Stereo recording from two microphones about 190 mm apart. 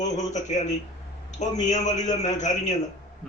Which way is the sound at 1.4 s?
40° left (ahead or behind).